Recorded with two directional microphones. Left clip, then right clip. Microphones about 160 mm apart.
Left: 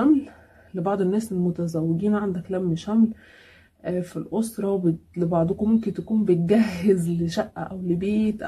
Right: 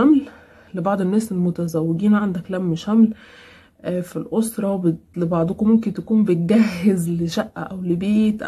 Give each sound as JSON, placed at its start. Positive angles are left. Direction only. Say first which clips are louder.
{"t": 0.7, "sound": "speech", "louder": "right 3 dB", "side_deg": -20}